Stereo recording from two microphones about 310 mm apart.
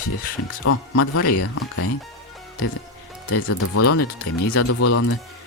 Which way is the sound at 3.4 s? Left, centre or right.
Left.